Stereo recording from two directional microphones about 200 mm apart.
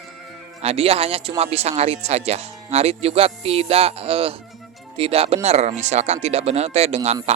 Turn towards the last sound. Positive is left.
turn(degrees=-30)  # may be behind; listen again after turning